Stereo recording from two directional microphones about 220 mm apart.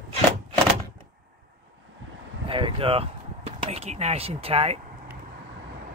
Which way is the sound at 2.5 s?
25° right (ahead or behind).